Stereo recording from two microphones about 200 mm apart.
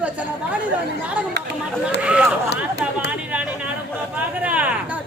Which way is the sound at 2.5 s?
55° left (ahead or behind).